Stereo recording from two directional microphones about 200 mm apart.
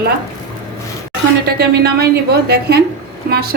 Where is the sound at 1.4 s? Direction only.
50° right (ahead or behind).